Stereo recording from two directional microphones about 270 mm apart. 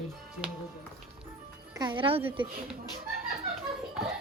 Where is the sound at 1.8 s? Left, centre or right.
Centre.